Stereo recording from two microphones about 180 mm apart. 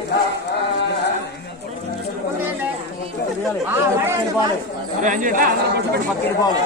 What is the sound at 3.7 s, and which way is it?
Speech, 15° right (ahead or behind).